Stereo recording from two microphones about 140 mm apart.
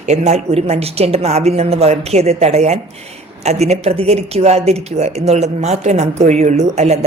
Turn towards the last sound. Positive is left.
turn(degrees=-50)  # may be behind; listen again after turning